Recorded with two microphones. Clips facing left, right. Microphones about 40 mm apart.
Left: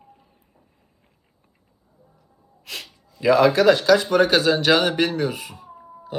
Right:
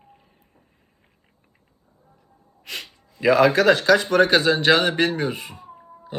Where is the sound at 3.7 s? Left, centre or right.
Right.